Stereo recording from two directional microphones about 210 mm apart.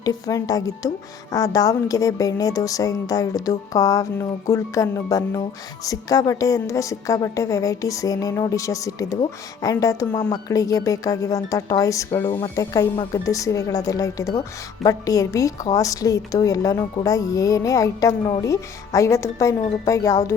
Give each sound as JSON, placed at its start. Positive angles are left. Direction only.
{"t": 0.0, "sound": "a woman's voice", "side_deg": 15}